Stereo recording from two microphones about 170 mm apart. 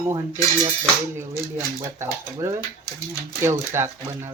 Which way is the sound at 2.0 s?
15° right (ahead or behind).